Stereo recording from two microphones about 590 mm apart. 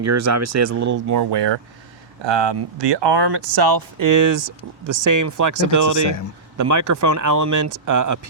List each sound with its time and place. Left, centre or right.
0.0 s speech: right